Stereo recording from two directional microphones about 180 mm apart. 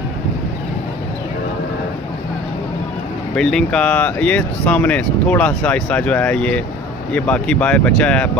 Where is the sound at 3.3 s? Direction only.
5° left (ahead or behind).